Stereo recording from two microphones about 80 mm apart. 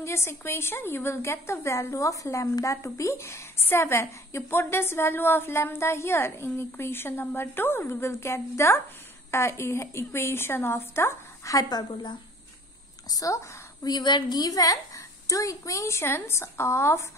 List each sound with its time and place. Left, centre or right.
0.0 s a woman's voice: left
11.7 s a woman's voice: left
13.1 s speech: left
13.8 s a woman's voice: left